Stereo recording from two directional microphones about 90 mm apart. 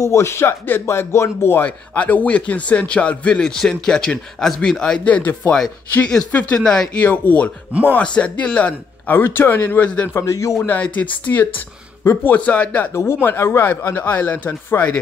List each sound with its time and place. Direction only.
0.0 s speech: 30° left (ahead or behind)
1.7 s a man's voice: 15° left (ahead or behind)
10.1 s a man's voice: 35° left (ahead or behind)
10.7 s speech: 15° left (ahead or behind)
12.4 s a man's voice: 15° left (ahead or behind)
12.9 s a man's voice: 30° left (ahead or behind)